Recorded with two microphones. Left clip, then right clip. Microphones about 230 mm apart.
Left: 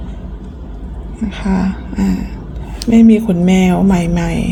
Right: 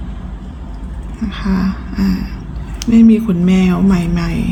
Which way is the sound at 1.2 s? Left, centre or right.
Centre.